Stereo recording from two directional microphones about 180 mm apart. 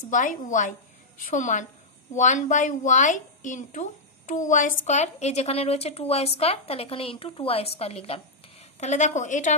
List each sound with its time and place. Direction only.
0.1 s a woman's voice: 45° left (ahead or behind)